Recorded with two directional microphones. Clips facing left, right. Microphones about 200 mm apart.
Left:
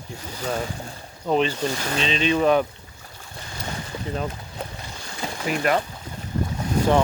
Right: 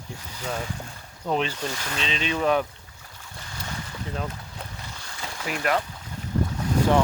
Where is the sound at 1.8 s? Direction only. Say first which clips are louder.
Left 6 dB; 35° left (ahead or behind).